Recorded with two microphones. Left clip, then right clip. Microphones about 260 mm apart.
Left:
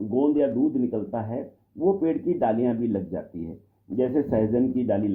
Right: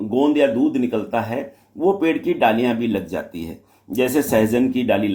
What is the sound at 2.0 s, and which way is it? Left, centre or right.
Speech, right.